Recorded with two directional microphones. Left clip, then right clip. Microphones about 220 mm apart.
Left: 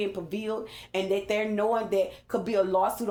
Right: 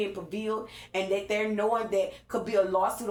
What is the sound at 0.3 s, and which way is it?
Speech, 35° left (ahead or behind).